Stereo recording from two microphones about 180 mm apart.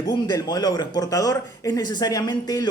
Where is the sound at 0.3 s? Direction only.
20° left (ahead or behind).